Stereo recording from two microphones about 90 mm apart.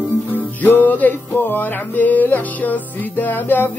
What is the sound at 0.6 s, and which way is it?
Music, 20° left (ahead or behind).